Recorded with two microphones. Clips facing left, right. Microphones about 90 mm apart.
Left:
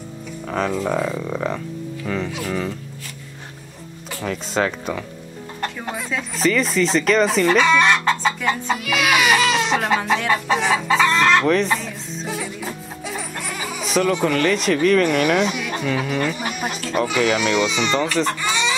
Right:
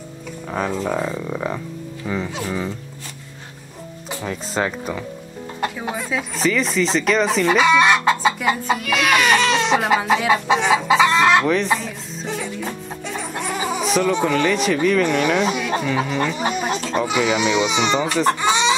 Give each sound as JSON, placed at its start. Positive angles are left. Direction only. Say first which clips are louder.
{"t": 0.5, "sound": "speech", "louder": "left 1 dB", "side_deg": -5}
{"t": 4.2, "sound": "speech", "louder": "left 2 dB", "side_deg": -5}
{"t": 11.4, "sound": "music", "louder": "left 1 dB", "side_deg": 0}
{"t": 13.3, "sound": "a sound", "louder": "right 5 dB", "side_deg": -25}
{"t": 13.8, "sound": "bleat", "louder": "left 1 dB", "side_deg": 0}
{"t": 14.2, "sound": "speech", "louder": "even", "side_deg": 0}
{"t": 16.3, "sound": "a sound", "louder": "right 4 dB", "side_deg": -25}
{"t": 17.0, "sound": "speech", "louder": "left 1 dB", "side_deg": -15}
{"t": 18.4, "sound": "chicken", "louder": "right 4 dB", "side_deg": -20}